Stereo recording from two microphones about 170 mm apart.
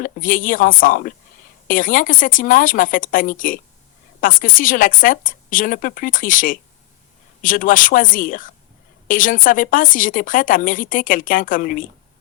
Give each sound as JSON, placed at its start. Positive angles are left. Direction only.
{"t": 0.0, "sound": "a woman's voice", "side_deg": 50}